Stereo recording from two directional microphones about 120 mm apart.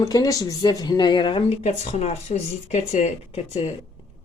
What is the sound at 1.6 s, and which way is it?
Speech, 70° left (ahead or behind).